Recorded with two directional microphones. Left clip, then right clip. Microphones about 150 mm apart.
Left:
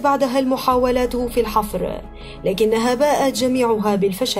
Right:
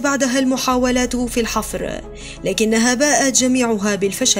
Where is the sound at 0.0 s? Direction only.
40° right (ahead or behind).